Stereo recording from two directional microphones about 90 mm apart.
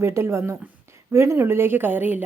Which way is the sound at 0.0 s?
30° right (ahead or behind).